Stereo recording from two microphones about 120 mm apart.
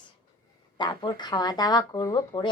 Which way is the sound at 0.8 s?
40° left (ahead or behind).